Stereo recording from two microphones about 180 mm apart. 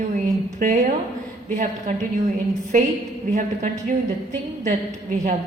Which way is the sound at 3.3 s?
45° right (ahead or behind).